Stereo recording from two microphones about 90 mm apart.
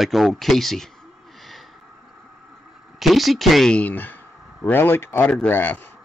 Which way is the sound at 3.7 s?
20° left (ahead or behind).